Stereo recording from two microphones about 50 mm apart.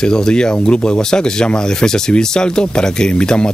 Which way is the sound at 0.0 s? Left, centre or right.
Centre.